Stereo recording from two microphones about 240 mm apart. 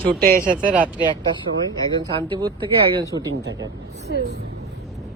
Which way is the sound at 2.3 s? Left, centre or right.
Centre.